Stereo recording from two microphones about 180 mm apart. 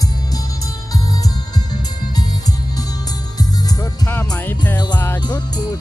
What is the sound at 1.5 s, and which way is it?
Music, 20° left (ahead or behind).